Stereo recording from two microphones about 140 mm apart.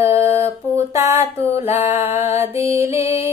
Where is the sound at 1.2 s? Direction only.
45° left (ahead or behind).